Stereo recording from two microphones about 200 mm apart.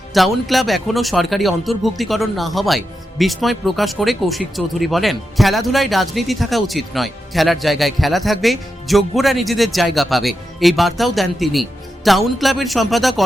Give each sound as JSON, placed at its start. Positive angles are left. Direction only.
{"t": 0.1, "sound": "speech", "side_deg": 0}